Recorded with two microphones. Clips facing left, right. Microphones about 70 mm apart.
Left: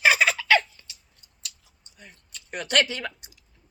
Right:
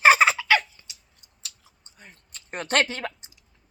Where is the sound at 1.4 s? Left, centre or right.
Right.